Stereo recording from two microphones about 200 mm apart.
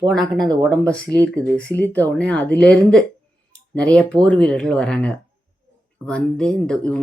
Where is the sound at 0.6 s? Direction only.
5° left (ahead or behind).